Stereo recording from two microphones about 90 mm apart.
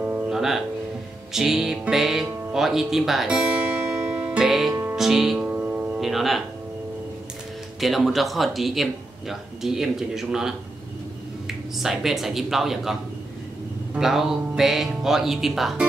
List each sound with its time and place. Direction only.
0.3 s music: 5° right (ahead or behind)
1.3 s speech: 5° right (ahead or behind)
4.9 s music: 5° right (ahead or behind)
5.5 s music: 15° right (ahead or behind)
5.9 s speech: centre (ahead or behind)
7.8 s speech: centre (ahead or behind)
13.9 s speech: 5° right (ahead or behind)